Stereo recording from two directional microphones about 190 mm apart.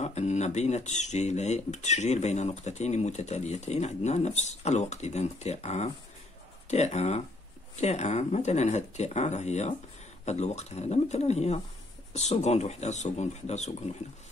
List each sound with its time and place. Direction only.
0.0 s speech: 35° left (ahead or behind)